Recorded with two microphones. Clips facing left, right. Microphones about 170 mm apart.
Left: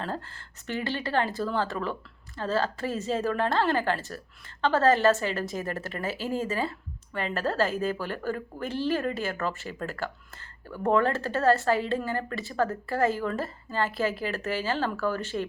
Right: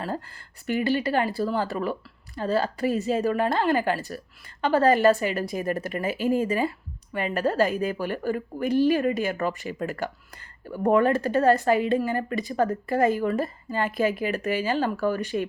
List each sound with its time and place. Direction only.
0.0 s speech: 10° right (ahead or behind)